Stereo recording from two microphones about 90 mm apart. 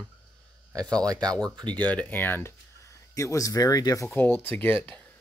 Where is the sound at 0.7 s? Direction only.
45° right (ahead or behind).